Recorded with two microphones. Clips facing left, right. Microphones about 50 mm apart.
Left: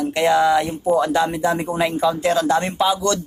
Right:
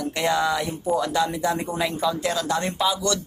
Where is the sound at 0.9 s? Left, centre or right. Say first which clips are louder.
Left 5 dB; left.